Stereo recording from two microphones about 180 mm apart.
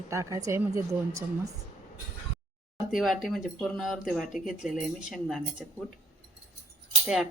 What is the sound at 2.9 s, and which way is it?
Cutlery, centre (ahead or behind).